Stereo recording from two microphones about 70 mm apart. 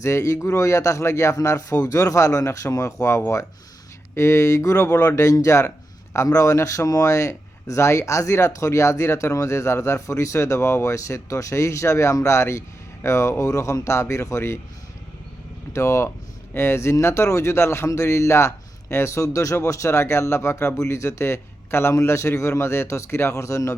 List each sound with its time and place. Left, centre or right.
0.0 s a man's voice: left
15.7 s a man's voice: left